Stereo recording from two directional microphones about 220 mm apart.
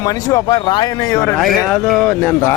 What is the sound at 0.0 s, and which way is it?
Speech, 15° left (ahead or behind).